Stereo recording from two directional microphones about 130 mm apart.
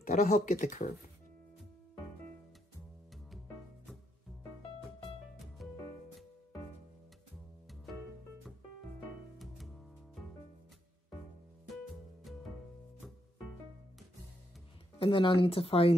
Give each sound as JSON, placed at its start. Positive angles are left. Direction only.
{"t": 0.0, "sound": "speech", "side_deg": 85}
{"t": 5.6, "sound": "music", "side_deg": 0}
{"t": 12.3, "sound": "music", "side_deg": 0}
{"t": 15.0, "sound": "speech", "side_deg": 40}